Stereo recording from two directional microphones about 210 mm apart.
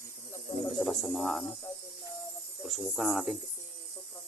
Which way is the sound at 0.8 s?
Centre (ahead or behind).